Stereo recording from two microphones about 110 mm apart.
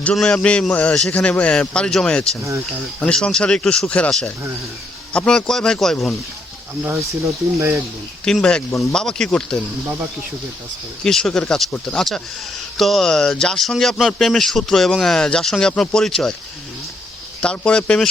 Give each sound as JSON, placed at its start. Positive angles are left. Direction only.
{"t": 0.0, "sound": "a man's voice", "side_deg": 5}
{"t": 6.8, "sound": "speech", "side_deg": -25}
{"t": 8.2, "sound": "a man's voice", "side_deg": 5}
{"t": 11.0, "sound": "speech", "side_deg": 5}
{"t": 11.7, "sound": "a man's voice", "side_deg": 15}
{"t": 12.7, "sound": "speech", "side_deg": 0}
{"t": 17.4, "sound": "a man's voice", "side_deg": 10}